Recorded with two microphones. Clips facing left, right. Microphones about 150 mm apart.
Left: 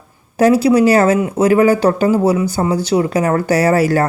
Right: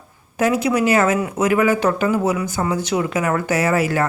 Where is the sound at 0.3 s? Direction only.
35° left (ahead or behind).